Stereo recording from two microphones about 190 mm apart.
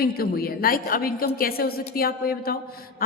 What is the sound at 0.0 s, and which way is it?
A woman's voice, 50° left (ahead or behind).